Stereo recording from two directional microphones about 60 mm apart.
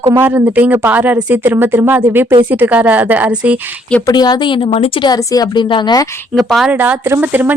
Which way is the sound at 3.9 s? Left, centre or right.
Centre.